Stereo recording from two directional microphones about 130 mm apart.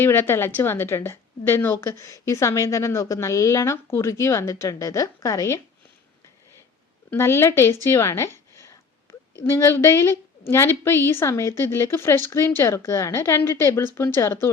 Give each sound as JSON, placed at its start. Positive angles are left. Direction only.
{"t": 0.0, "sound": "a woman's voice", "side_deg": 15}
{"t": 7.1, "sound": "a woman's voice", "side_deg": 20}